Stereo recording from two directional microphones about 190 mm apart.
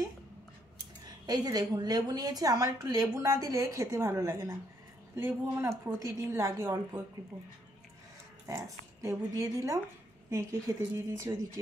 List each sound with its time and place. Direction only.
1.2 s a woman's voice: 20° right (ahead or behind)
8.5 s speech: 15° right (ahead or behind)